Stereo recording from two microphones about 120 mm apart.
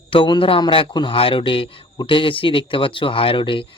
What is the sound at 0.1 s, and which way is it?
Speech, 45° left (ahead or behind).